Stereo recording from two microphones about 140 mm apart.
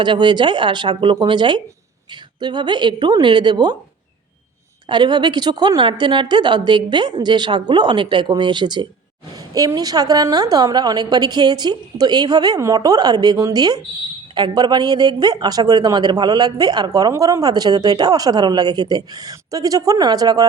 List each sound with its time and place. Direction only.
0.0 s a woman's voice: 35° right (ahead or behind)
4.9 s a woman's voice: 30° right (ahead or behind)